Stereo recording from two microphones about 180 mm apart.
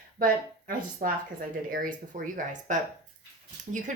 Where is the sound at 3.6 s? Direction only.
45° right (ahead or behind).